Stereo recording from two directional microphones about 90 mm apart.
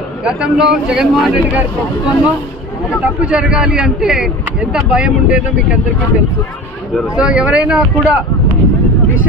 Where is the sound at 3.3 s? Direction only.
10° right (ahead or behind).